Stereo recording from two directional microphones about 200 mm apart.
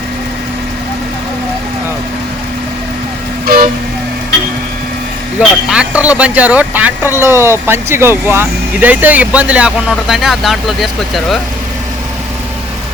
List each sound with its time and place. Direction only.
3.4 s vehicle: 50° right (ahead or behind)
5.4 s speech: 5° right (ahead or behind)